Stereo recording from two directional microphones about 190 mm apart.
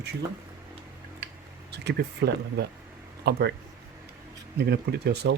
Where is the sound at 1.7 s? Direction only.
65° right (ahead or behind).